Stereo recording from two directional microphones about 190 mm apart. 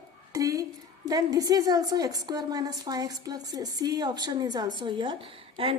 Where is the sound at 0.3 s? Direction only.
15° right (ahead or behind).